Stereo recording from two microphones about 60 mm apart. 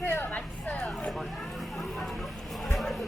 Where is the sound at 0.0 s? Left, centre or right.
Left.